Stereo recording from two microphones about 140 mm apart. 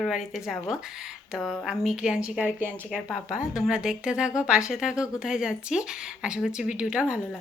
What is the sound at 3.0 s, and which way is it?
Speech, centre (ahead or behind).